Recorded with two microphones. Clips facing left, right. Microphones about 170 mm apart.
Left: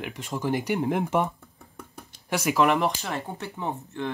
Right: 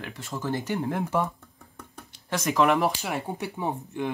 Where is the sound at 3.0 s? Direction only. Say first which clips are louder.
Right 2 dB; 10° right (ahead or behind).